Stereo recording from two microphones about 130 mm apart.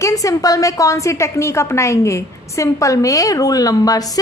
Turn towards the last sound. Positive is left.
turn(degrees=30)  # may be behind; listen again after turning